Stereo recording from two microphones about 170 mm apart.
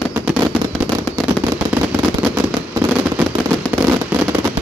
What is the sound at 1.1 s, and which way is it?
Fireworks, 10° left (ahead or behind).